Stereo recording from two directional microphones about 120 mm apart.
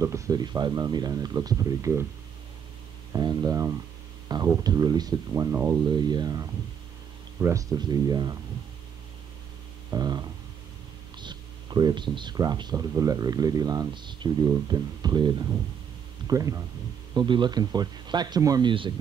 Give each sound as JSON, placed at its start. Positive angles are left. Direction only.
{"t": 0.0, "sound": "speech", "side_deg": -30}
{"t": 3.1, "sound": "speech", "side_deg": -35}
{"t": 5.9, "sound": "speech", "side_deg": -35}
{"t": 9.9, "sound": "speech", "side_deg": -35}
{"t": 16.3, "sound": "speech", "side_deg": -30}
{"t": 17.1, "sound": "speech", "side_deg": -40}